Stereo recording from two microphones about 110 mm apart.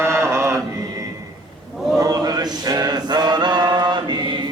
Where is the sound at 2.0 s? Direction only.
35° right (ahead or behind).